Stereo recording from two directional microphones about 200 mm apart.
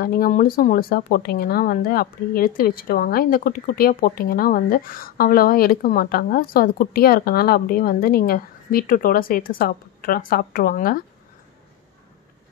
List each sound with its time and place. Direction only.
0.0 s speech: 45° left (ahead or behind)